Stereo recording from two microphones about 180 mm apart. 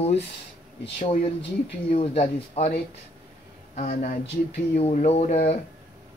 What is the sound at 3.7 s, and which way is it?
Speech, 45° left (ahead or behind).